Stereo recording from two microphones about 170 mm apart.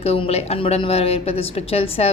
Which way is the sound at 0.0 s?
35° left (ahead or behind).